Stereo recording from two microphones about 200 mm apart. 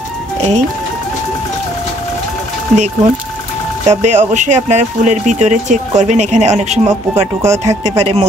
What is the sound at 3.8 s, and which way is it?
Speech, 35° right (ahead or behind).